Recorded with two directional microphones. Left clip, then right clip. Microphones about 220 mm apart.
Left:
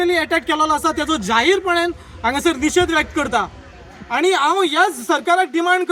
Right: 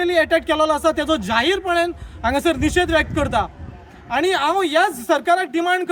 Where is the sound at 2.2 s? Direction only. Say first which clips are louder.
Left 1 dB; 20° right (ahead or behind).